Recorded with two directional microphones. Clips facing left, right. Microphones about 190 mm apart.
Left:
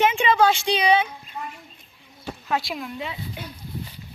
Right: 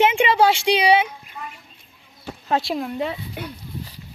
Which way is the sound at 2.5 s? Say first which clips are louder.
Right 5 dB; 30° right (ahead or behind).